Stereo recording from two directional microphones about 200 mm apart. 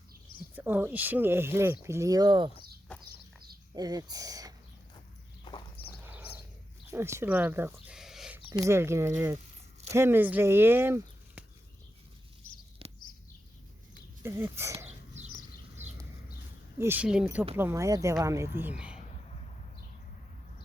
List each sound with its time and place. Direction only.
0.5 s speech: 10° right (ahead or behind)
3.8 s speech: 20° right (ahead or behind)
5.5 s horse: 25° left (ahead or behind)
6.1 s a sound: 10° right (ahead or behind)
6.9 s speech: 10° right (ahead or behind)
12.8 s a sound: 30° right (ahead or behind)
14.2 s speech: 10° right (ahead or behind)
15.3 s a sound: 40° left (ahead or behind)
16.7 s speech: 10° right (ahead or behind)